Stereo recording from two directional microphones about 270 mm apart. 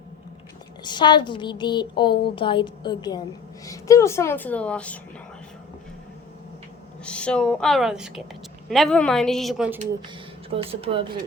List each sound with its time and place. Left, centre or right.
0.9 s a woman's voice: centre
7.0 s speech: centre
10.5 s speech: right